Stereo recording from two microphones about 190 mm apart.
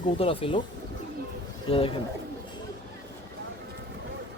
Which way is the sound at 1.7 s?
30° left (ahead or behind).